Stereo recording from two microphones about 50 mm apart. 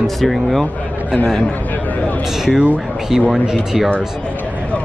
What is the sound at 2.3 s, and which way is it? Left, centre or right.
Speech, centre.